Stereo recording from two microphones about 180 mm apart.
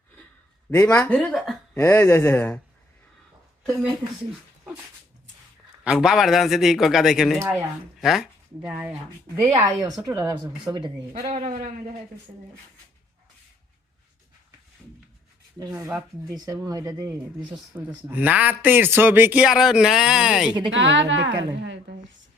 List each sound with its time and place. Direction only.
0.7 s speech: 10° left (ahead or behind)
1.7 s speech: 10° left (ahead or behind)
3.6 s a woman's voice: centre (ahead or behind)
5.8 s speech: 5° right (ahead or behind)
10.1 s speech: 20° right (ahead or behind)
11.1 s a man's voice: 40° right (ahead or behind)
15.5 s speech: 20° right (ahead or behind)
15.9 s speech: centre (ahead or behind)
16.3 s speech: 20° right (ahead or behind)
17.7 s speech: 10° right (ahead or behind)
20.7 s a woman's voice: 90° right; by 21.9 s 70° right (ahead or behind)